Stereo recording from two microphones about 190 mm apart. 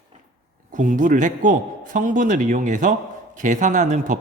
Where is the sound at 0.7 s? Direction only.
40° right (ahead or behind).